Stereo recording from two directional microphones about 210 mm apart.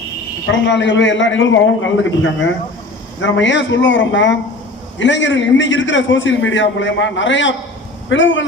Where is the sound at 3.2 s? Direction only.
60° left (ahead or behind).